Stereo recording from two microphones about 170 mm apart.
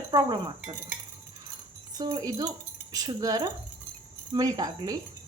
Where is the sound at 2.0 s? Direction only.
20° right (ahead or behind).